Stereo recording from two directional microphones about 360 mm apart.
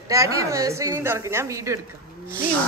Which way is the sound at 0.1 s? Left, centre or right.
Centre.